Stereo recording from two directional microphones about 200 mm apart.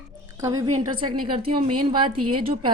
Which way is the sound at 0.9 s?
25° right (ahead or behind).